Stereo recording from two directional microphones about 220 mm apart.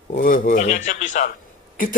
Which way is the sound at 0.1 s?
40° left (ahead or behind).